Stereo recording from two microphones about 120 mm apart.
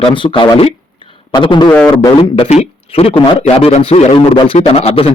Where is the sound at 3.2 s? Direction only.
45° left (ahead or behind).